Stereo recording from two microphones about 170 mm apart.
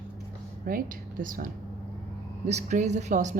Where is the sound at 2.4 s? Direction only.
40° right (ahead or behind).